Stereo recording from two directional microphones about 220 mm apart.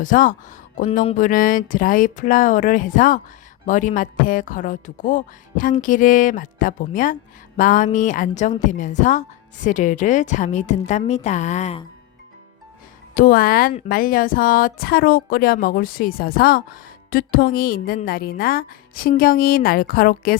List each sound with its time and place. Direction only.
0.0 s speech: 35° left (ahead or behind)
13.1 s speech: 40° left (ahead or behind)